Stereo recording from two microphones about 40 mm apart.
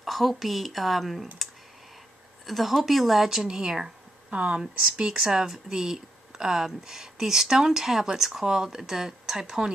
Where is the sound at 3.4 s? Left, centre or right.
Centre.